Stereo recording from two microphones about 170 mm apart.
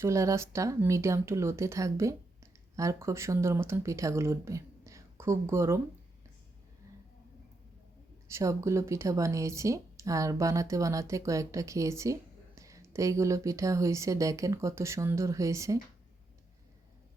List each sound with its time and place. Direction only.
0.0 s speech: 20° right (ahead or behind)
8.3 s speech: 15° right (ahead or behind)